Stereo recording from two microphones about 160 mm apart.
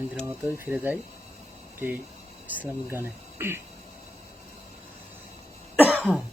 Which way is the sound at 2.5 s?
10° right (ahead or behind).